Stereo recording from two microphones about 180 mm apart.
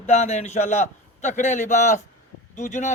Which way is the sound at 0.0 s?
35° left (ahead or behind).